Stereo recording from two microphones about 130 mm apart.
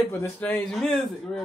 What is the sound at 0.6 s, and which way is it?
Speech, 5° left (ahead or behind).